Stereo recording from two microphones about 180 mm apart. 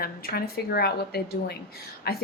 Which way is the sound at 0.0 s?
60° left (ahead or behind).